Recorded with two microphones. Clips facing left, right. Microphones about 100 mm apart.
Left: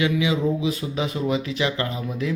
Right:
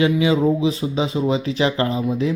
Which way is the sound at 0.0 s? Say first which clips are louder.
Right 5 dB; 35° right (ahead or behind).